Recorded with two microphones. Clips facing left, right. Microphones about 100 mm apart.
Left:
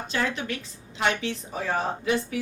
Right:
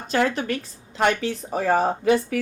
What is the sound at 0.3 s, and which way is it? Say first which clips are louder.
Speech: right 6 dB; 45° right (ahead or behind).